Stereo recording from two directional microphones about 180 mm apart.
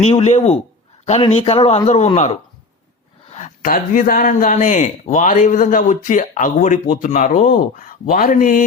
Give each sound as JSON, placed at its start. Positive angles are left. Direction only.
{"t": 0.0, "sound": "speech", "side_deg": 35}